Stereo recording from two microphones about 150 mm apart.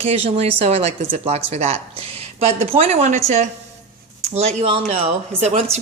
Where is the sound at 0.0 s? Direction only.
40° right (ahead or behind).